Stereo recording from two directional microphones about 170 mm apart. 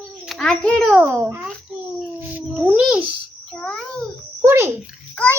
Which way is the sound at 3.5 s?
5° left (ahead or behind).